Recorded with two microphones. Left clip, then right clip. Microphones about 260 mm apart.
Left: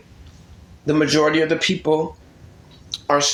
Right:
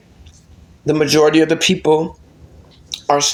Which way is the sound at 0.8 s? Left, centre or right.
Right.